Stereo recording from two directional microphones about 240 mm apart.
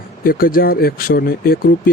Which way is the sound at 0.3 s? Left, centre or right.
Left.